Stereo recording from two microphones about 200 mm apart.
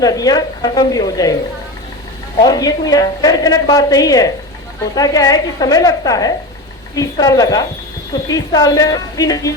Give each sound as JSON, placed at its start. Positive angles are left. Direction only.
{"t": 0.0, "sound": "a woman's voice", "side_deg": 20}
{"t": 2.4, "sound": "a woman's voice", "side_deg": 20}